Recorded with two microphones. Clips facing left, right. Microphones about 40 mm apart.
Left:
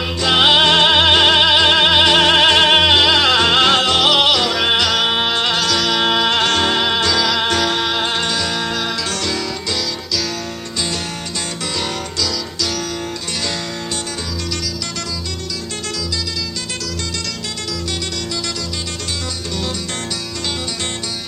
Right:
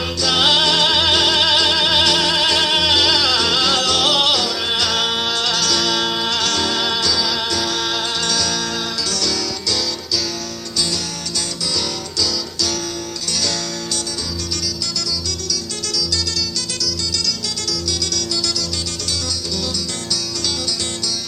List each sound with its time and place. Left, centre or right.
0.2 s music: left
2.1 s music: left
4.4 s music: left
4.8 s music: centre
5.0 s music: left
5.6 s music: centre
6.1 s music: left